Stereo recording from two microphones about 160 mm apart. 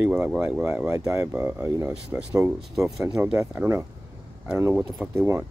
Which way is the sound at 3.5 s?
15° right (ahead or behind).